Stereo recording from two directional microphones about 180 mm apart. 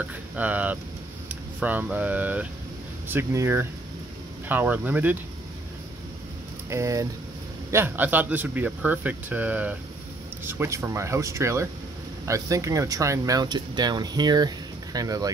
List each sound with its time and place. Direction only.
0.1 s speech: 10° right (ahead or behind)
6.7 s speech: 15° right (ahead or behind)